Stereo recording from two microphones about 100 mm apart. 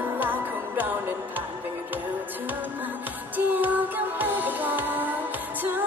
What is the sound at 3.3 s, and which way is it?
Music, 20° right (ahead or behind).